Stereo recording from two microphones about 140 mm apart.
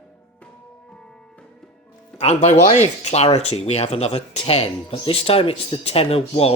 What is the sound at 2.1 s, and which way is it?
Speech, 50° left (ahead or behind).